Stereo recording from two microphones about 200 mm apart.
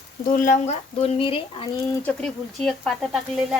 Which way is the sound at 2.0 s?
5° left (ahead or behind).